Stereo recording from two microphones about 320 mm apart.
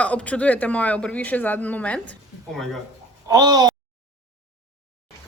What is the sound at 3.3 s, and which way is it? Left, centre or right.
Speech, centre.